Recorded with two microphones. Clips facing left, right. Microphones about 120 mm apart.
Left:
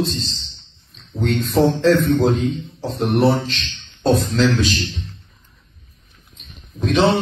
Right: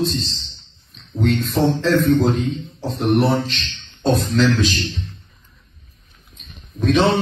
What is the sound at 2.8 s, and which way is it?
A man's voice, centre (ahead or behind).